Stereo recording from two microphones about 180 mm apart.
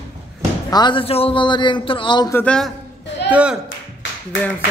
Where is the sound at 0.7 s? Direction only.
25° left (ahead or behind).